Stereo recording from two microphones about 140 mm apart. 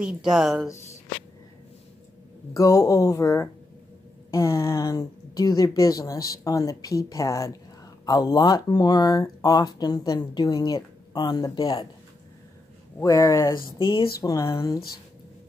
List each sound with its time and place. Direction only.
0.0 s speech: 5° right (ahead or behind)
2.5 s a woman's voice: 25° left (ahead or behind)
13.0 s speech: 25° left (ahead or behind)
13.7 s speech: 35° left (ahead or behind)